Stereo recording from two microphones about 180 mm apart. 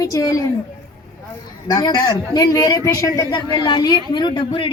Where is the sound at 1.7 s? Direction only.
25° left (ahead or behind).